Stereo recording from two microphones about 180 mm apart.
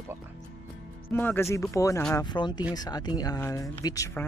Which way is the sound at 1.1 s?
10° left (ahead or behind).